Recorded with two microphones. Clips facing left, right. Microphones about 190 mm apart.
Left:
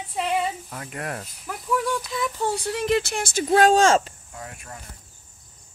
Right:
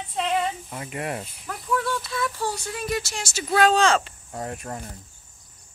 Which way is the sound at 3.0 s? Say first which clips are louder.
Left 6 dB; 55° left (ahead or behind).